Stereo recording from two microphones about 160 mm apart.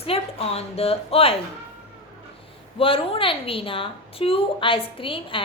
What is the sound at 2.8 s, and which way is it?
A woman's voice, 35° left (ahead or behind).